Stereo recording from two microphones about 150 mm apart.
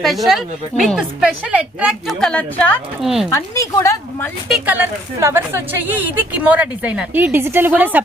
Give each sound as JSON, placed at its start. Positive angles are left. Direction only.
{"t": 0.0, "sound": "speech", "side_deg": 0}
{"t": 3.0, "sound": "speech", "side_deg": 0}
{"t": 3.2, "sound": "a woman's voice", "side_deg": 20}
{"t": 4.4, "sound": "a woman's voice", "side_deg": -5}